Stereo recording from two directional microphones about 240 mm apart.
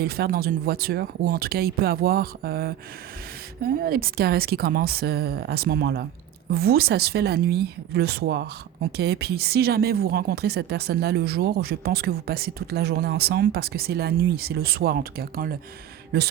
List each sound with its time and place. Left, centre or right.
0.0 s speech: right